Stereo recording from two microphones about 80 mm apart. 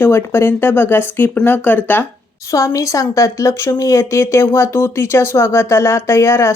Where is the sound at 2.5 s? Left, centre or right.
Left.